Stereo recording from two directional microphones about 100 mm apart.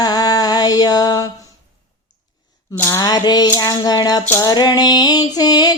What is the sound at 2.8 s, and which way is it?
Speech, 25° left (ahead or behind).